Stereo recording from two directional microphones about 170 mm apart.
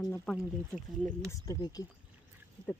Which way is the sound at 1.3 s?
20° left (ahead or behind).